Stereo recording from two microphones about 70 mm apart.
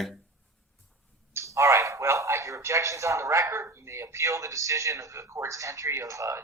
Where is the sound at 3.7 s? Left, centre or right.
Right.